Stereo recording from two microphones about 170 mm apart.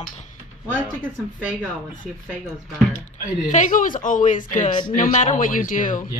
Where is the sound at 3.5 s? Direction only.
50° left (ahead or behind).